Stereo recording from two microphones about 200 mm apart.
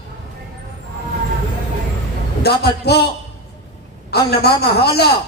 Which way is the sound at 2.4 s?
55° left (ahead or behind).